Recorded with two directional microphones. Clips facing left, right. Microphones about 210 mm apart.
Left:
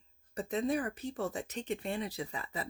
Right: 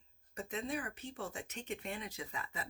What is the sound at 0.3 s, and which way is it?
Speech, 35° left (ahead or behind).